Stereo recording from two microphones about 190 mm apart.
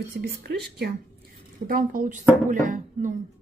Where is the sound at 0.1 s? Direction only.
55° right (ahead or behind).